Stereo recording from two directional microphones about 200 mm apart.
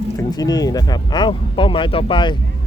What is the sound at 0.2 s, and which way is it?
Speech, 20° left (ahead or behind).